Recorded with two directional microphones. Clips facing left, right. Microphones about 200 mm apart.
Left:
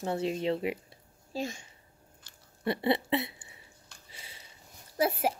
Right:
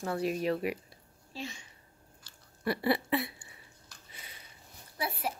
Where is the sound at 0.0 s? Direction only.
25° left (ahead or behind).